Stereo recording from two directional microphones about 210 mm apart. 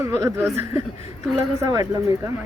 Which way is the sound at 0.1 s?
15° right (ahead or behind).